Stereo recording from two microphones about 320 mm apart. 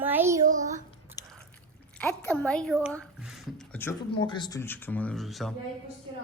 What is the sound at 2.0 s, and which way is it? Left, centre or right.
A woman's voice, centre.